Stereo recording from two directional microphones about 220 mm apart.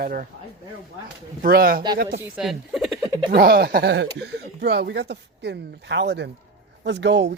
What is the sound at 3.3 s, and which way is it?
Speech, 45° right (ahead or behind).